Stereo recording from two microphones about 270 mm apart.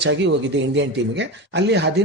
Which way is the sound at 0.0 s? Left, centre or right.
Right.